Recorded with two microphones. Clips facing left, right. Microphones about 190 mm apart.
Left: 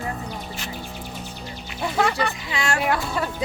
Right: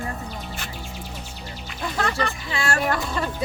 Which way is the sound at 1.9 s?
10° left (ahead or behind).